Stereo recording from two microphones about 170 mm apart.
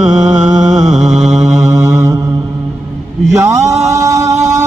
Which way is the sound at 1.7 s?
20° right (ahead or behind).